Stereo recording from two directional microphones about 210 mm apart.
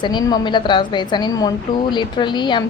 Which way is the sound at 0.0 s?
20° left (ahead or behind).